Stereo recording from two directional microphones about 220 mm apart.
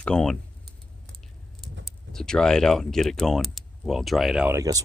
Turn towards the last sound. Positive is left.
turn(degrees=-15)  # may be behind; listen again after turning